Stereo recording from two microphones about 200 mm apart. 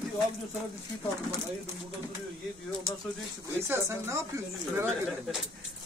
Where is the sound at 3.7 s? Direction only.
15° right (ahead or behind).